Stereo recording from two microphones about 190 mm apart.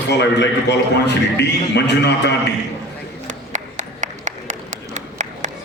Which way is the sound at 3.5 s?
40° right (ahead or behind).